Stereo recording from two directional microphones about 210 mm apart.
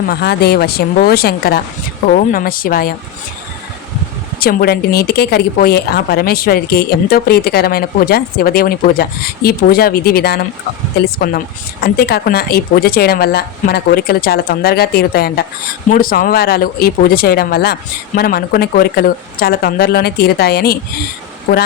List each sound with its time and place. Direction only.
0.1 s speech: 50° left (ahead or behind)
4.4 s speech: 45° left (ahead or behind)